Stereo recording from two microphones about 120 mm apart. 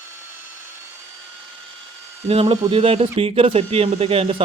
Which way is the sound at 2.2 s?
55° right (ahead or behind).